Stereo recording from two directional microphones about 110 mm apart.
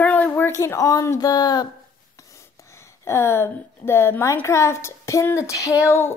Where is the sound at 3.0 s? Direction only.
25° left (ahead or behind).